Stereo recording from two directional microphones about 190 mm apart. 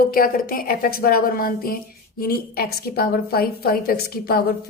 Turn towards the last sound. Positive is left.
turn(degrees=50)  # may be behind; listen again after turning